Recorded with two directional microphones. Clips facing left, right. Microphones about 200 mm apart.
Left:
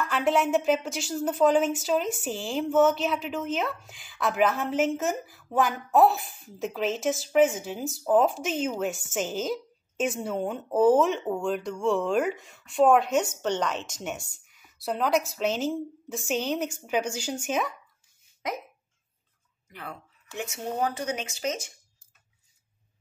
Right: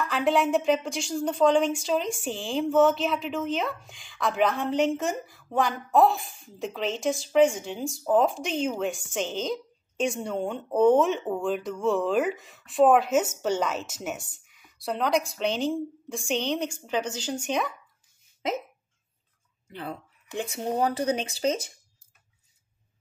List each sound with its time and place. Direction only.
0.0 s a woman's voice: centre (ahead or behind)
19.7 s speech: 30° right (ahead or behind)